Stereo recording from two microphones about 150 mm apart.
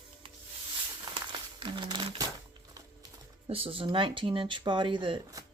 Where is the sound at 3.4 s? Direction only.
40° right (ahead or behind).